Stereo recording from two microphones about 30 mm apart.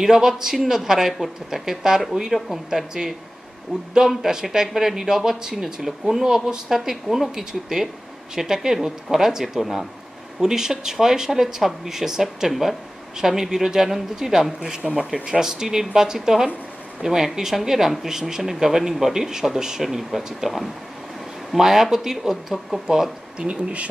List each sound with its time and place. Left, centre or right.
0.0 s speech: centre
2.9 s speech: right
5.6 s speech: centre
9.6 s speech: centre
10.4 s speech: centre
14.8 s speech: centre
15.1 s speech: right
19.8 s speech: centre
23.4 s speech: right